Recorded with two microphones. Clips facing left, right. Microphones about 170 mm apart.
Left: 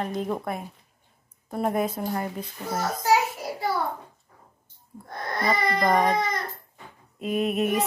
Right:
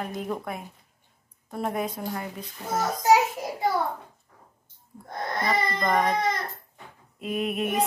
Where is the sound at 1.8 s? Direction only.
5° left (ahead or behind).